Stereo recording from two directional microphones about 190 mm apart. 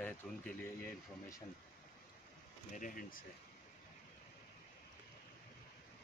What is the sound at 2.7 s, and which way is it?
Speech, 45° left (ahead or behind).